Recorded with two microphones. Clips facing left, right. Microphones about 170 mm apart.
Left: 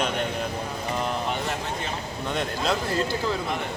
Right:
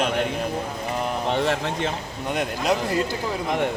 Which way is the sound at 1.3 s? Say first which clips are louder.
Right 6 dB; 80° right.